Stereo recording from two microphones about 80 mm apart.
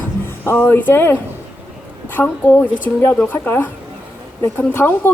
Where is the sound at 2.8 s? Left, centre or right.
Left.